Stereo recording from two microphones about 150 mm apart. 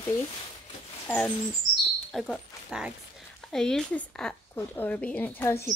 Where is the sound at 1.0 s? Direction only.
10° left (ahead or behind).